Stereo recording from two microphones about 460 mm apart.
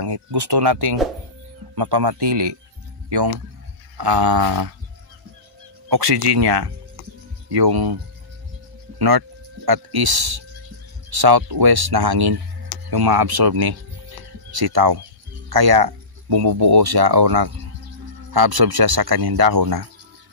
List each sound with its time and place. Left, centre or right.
0.0 s speech: right
5.9 s speech: right